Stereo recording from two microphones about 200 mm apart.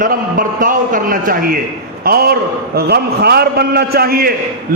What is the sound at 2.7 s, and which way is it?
A man's voice, 55° right (ahead or behind).